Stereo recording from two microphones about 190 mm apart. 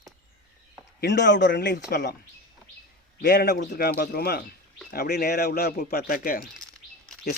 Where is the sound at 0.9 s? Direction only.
65° left (ahead or behind).